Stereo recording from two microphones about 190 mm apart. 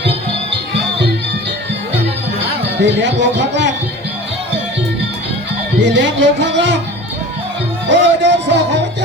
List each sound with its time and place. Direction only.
2.7 s speech: 70° right (ahead or behind)
5.8 s speech: 70° right (ahead or behind)
7.9 s speech: 65° right (ahead or behind)